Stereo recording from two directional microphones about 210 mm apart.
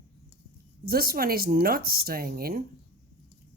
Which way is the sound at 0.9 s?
45° right (ahead or behind).